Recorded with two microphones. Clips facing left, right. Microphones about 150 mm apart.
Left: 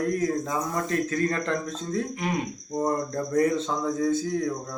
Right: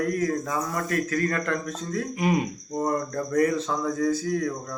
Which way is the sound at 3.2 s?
25° left (ahead or behind).